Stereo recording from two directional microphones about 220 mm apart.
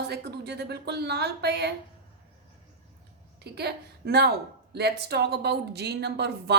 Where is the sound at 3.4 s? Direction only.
50° right (ahead or behind).